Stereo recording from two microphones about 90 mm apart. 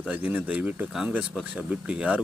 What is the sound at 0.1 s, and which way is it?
Speech, 20° right (ahead or behind).